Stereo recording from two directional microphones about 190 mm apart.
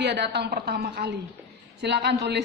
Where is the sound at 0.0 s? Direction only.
65° right (ahead or behind).